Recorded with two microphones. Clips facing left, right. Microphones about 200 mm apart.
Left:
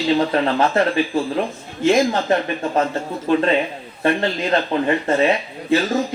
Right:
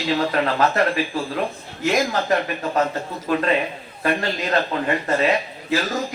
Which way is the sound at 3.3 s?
25° left (ahead or behind).